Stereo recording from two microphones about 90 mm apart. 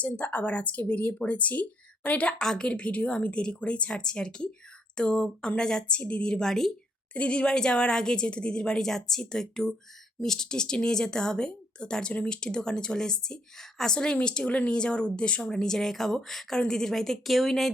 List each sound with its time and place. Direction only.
0.0 s a woman's voice: 15° left (ahead or behind); by 17.7 s centre (ahead or behind)